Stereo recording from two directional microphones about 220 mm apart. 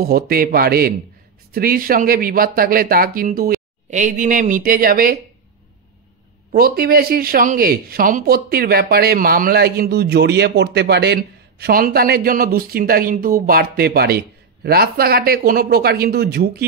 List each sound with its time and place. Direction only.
0.0 s speech: 45° right (ahead or behind)
6.5 s speech: 45° right (ahead or behind)